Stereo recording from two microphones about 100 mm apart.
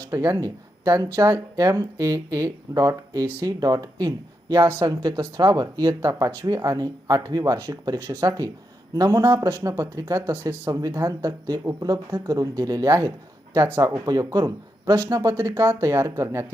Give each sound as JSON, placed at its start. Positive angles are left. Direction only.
{"t": 0.1, "sound": "speech", "side_deg": -35}
{"t": 15.5, "sound": "speech", "side_deg": -25}